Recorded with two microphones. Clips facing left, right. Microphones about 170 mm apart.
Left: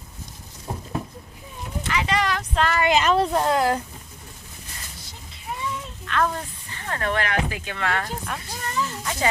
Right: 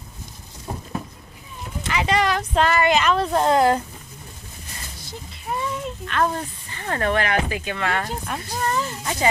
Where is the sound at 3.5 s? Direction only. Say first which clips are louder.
Right 7 dB; 5° left (ahead or behind).